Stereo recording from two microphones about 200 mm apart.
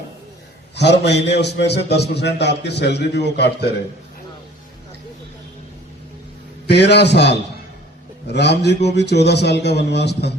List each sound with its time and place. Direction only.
0.8 s a man's voice: 60° left (ahead or behind)
6.7 s a man's voice: 55° left (ahead or behind)